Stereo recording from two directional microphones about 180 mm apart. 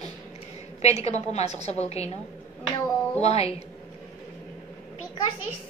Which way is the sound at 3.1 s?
35° left (ahead or behind).